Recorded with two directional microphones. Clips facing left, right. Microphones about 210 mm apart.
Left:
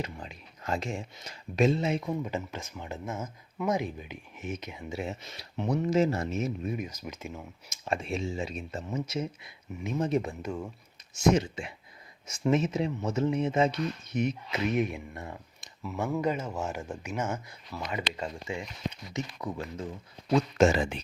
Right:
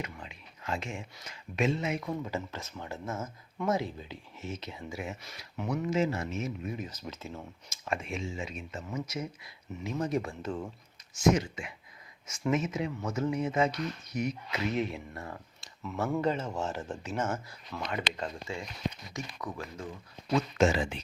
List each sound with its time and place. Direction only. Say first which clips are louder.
0.0 s speech: left 3 dB; 40° left (ahead or behind)
6.7 s speech: left 3 dB; 10° left (ahead or behind)
7.9 s speech: left 3 dB; 35° left (ahead or behind)
15.8 s speech: even; 5° left (ahead or behind)
19.4 s speech: left 4 dB; 25° left (ahead or behind)
20.6 s speech: left 3 dB; 45° left (ahead or behind)